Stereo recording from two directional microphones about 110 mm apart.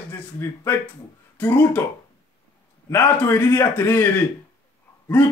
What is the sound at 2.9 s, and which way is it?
Speech, 20° left (ahead or behind).